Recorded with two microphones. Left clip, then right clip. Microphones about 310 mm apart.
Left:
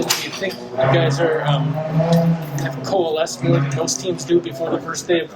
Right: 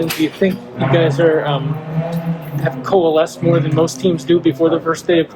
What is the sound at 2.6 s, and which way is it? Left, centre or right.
Speech, right.